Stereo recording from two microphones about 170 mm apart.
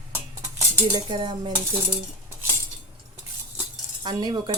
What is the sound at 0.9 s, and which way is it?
Speech, 25° right (ahead or behind).